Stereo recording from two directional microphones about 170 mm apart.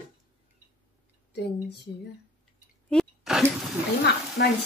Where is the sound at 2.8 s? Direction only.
Centre (ahead or behind).